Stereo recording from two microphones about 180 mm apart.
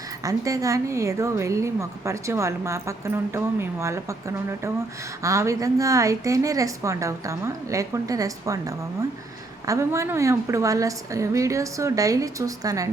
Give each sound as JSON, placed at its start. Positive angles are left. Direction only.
{"t": 0.3, "sound": "a woman's voice", "side_deg": -20}
{"t": 9.6, "sound": "a woman's voice", "side_deg": -15}